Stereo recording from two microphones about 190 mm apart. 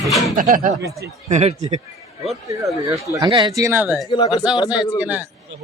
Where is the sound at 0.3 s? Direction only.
45° right (ahead or behind).